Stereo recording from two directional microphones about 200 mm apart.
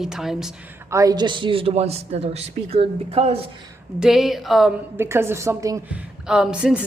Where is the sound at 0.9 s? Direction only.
15° right (ahead or behind).